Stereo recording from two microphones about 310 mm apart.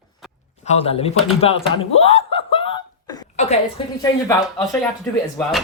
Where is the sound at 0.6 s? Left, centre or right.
Centre.